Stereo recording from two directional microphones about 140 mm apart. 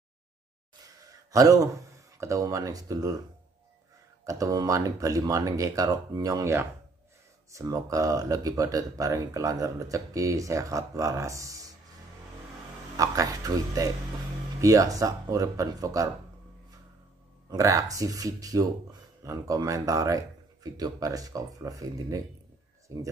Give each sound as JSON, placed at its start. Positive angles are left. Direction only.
{"t": 1.3, "sound": "speech", "side_deg": -25}
{"t": 4.2, "sound": "speech", "side_deg": -25}
{"t": 12.9, "sound": "speech", "side_deg": -25}
{"t": 17.5, "sound": "speech", "side_deg": -25}